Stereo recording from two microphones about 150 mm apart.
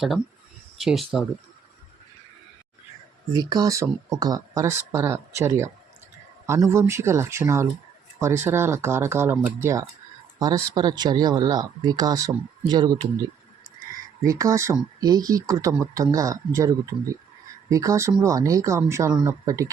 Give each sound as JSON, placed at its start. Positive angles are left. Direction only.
{"t": 0.8, "sound": "speech", "side_deg": 0}
{"t": 3.3, "sound": "speech", "side_deg": -25}
{"t": 14.3, "sound": "speech", "side_deg": -20}